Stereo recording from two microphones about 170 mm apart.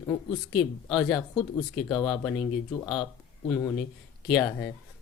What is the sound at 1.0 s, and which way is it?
Speech, 5° left (ahead or behind).